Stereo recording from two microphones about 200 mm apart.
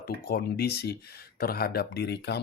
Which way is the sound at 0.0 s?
50° left (ahead or behind).